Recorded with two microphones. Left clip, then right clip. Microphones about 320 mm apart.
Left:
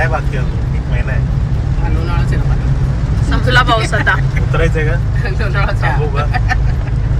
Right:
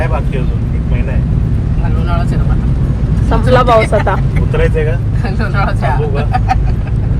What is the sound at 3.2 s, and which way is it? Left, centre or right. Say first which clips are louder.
Speech: right 2 dB; centre.